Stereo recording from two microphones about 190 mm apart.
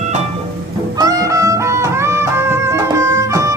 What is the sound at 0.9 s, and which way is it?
Music, 20° right (ahead or behind).